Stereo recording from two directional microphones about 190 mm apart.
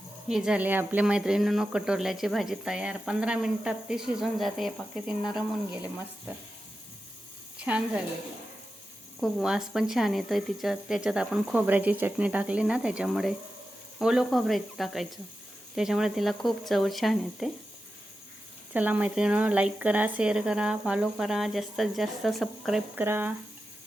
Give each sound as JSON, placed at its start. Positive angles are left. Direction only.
{"t": 0.3, "sound": "speech", "side_deg": -5}
{"t": 7.6, "sound": "a woman's voice", "side_deg": -5}
{"t": 9.2, "sound": "speech", "side_deg": -5}
{"t": 18.7, "sound": "a woman's voice", "side_deg": -10}